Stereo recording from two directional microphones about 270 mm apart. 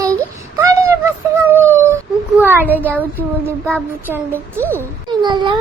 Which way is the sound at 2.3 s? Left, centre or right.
Centre.